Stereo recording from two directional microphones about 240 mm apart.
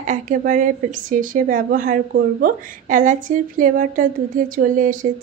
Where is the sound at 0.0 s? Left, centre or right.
Right.